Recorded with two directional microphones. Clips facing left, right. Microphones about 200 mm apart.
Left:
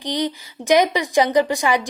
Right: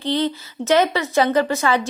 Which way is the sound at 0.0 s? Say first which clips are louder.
Right 2 dB; 15° left (ahead or behind).